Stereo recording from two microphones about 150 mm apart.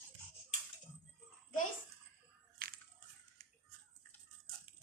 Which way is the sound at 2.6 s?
80° right.